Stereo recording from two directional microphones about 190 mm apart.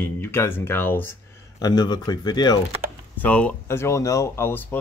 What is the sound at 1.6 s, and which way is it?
Speech, 20° left (ahead or behind).